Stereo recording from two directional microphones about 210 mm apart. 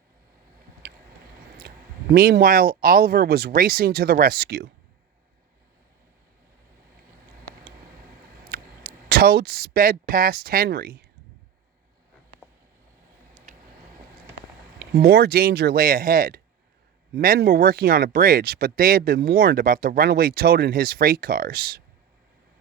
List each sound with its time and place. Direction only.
0.8 s vehicle: 50° right (ahead or behind)
2.1 s speech: 45° right (ahead or behind)
8.4 s speech: 45° right (ahead or behind)
14.8 s speech: 50° right (ahead or behind)